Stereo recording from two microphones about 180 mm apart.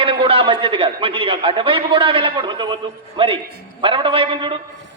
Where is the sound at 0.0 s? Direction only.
30° right (ahead or behind).